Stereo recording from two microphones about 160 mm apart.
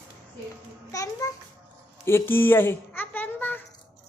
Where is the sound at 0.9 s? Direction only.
20° left (ahead or behind).